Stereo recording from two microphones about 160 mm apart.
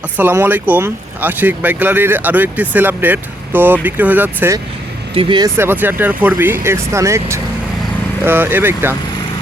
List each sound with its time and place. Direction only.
0.2 s speech: 10° right (ahead or behind)
5.1 s speech: 30° right (ahead or behind)
5.5 s speech: 15° right (ahead or behind)